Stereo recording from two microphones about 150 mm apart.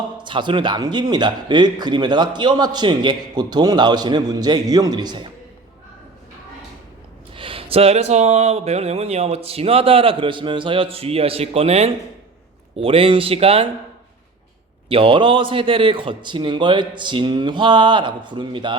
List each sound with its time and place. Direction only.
0.2 s a man's voice: 30° right (ahead or behind)
7.3 s speech: 35° right (ahead or behind)
14.8 s speech: 35° right (ahead or behind)